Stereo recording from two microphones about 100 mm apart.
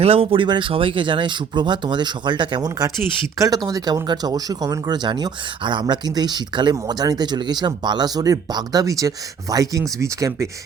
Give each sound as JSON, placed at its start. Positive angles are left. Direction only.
{"t": 0.0, "sound": "speech", "side_deg": -70}
{"t": 0.4, "sound": "speech", "side_deg": -55}